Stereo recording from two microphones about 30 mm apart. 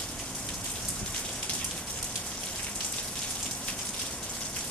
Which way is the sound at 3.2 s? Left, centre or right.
Left.